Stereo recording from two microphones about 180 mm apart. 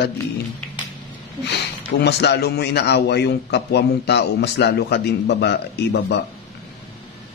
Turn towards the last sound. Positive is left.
turn(degrees=65)  # may be behind; listen again after turning